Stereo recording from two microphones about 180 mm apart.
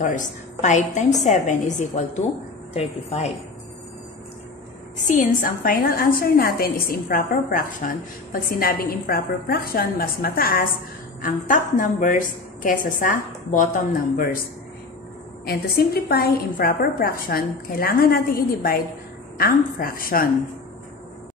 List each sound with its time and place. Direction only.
0.0 s a woman's voice: 45° left (ahead or behind)
5.0 s a woman's voice: 45° left (ahead or behind)